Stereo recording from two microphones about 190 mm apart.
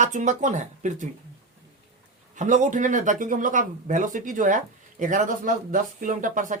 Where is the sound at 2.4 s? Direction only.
40° right (ahead or behind).